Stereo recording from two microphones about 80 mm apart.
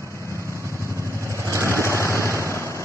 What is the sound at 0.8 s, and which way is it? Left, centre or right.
Vehicle, right.